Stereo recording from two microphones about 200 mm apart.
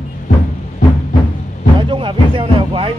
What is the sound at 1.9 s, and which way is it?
Speech, 25° right (ahead or behind).